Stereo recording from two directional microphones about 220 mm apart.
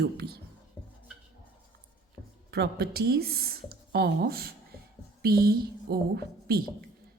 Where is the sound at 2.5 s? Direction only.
45° right (ahead or behind).